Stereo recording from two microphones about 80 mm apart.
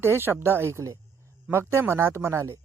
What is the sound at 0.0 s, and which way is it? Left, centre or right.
Speech, right.